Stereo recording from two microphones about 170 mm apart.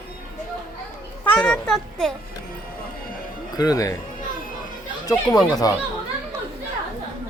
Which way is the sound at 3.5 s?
20° left (ahead or behind).